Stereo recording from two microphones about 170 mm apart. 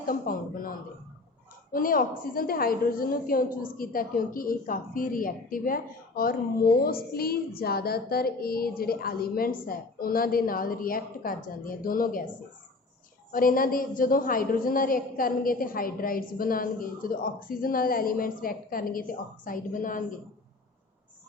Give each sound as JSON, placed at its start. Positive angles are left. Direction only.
{"t": 0.0, "sound": "a woman's voice", "side_deg": 55}
{"t": 13.3, "sound": "a woman's voice", "side_deg": 55}